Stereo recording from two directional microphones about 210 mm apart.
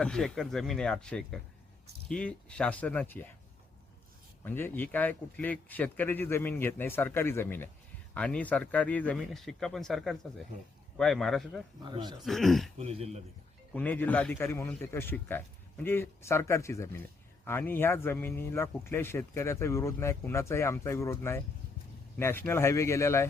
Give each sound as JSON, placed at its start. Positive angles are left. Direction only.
{"t": 0.0, "sound": "speech", "side_deg": 5}
{"t": 4.4, "sound": "a man's voice", "side_deg": 10}
{"t": 11.8, "sound": "speech", "side_deg": -20}
{"t": 12.2, "sound": "speech", "side_deg": 0}
{"t": 12.8, "sound": "speech", "side_deg": -30}
{"t": 13.7, "sound": "a man's voice", "side_deg": 10}